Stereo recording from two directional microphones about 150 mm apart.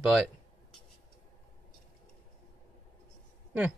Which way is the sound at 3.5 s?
10° right (ahead or behind).